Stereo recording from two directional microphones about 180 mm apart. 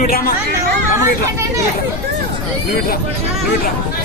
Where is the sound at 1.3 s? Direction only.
15° right (ahead or behind).